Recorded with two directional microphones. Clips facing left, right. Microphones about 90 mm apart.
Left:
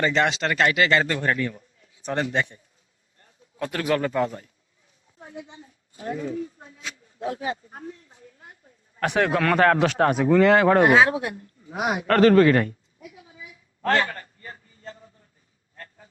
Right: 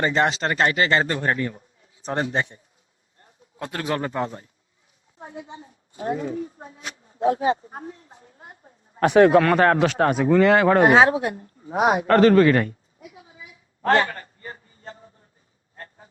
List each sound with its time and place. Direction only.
0.0 s a man's voice: 30° right (ahead or behind)
5.2 s a woman's voice: 35° right (ahead or behind)
13.8 s a sound: 25° right (ahead or behind)